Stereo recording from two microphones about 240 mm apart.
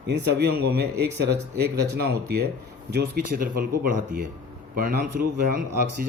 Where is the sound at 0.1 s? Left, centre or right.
Right.